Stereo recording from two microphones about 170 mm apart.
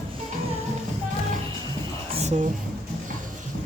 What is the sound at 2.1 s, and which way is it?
Music, 40° right (ahead or behind).